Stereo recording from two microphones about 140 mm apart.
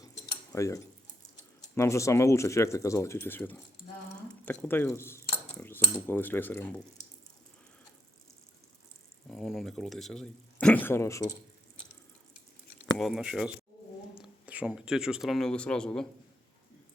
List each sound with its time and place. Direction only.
0.5 s speech: 20° left (ahead or behind)
9.3 s speech: centre (ahead or behind); by 11.3 s 20° left (ahead or behind)
13.0 s speech: 5° right (ahead or behind)